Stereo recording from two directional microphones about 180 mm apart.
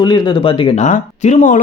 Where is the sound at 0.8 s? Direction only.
40° left (ahead or behind).